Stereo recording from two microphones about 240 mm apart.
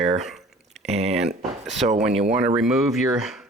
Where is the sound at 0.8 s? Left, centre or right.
Right.